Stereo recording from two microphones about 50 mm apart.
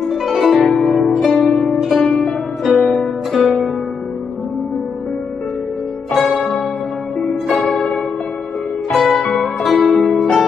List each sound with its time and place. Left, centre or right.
0.1 s harp: centre
1.0 s music: centre
7.4 s music: left
8.9 s zither: centre
9.2 s music: centre